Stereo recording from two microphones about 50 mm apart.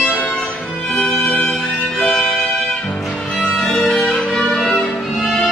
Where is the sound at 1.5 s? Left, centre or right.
Centre.